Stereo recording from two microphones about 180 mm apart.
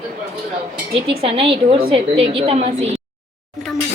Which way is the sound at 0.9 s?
30° right (ahead or behind).